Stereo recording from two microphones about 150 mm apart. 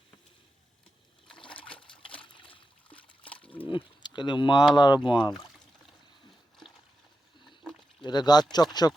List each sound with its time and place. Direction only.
1.5 s water: 10° left (ahead or behind)
1.8 s trickle: 35° left (ahead or behind)
3.2 s a sound: 10° left (ahead or behind)
3.7 s speech: 30° left (ahead or behind)
7.6 s a sound: 5° left (ahead or behind)
8.0 s speech: 30° left (ahead or behind)